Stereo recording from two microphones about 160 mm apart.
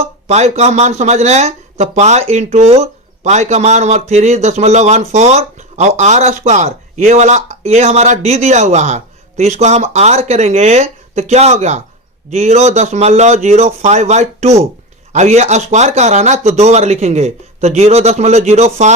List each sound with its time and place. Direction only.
0.0 s speech: 45° right (ahead or behind)